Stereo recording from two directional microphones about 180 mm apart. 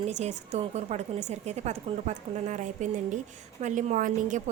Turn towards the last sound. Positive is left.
turn(degrees=-45)  # may be behind; listen again after turning